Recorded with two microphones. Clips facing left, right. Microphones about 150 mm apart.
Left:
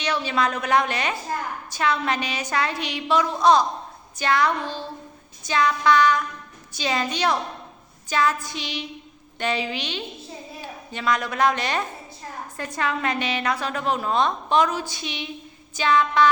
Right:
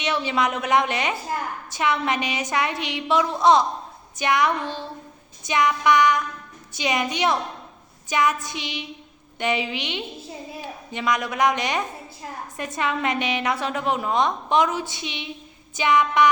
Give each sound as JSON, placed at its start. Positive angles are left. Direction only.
{"t": 0.0, "sound": "a woman's voice", "side_deg": -20}